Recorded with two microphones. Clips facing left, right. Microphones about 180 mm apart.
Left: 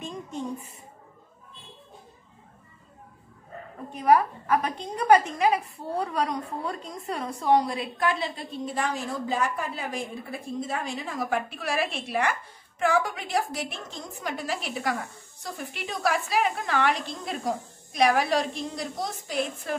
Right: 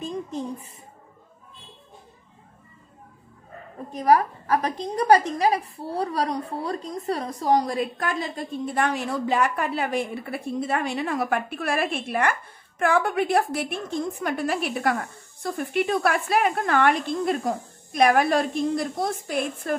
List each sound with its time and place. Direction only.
3.9 s a woman's voice: 35° right (ahead or behind); by 19.7 s 55° right (ahead or behind)